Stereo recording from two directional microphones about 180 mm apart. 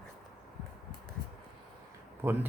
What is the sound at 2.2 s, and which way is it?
Speech, 10° right (ahead or behind).